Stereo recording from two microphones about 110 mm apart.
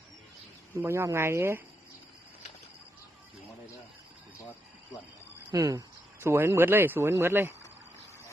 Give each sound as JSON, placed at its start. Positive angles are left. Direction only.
{"t": 0.8, "sound": "speech", "side_deg": -25}
{"t": 5.5, "sound": "speech", "side_deg": -30}